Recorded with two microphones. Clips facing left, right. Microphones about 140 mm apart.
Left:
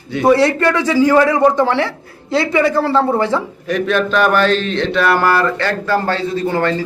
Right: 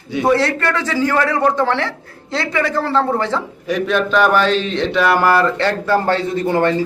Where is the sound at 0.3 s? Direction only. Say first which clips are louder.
Left 4 dB; 15° left (ahead or behind).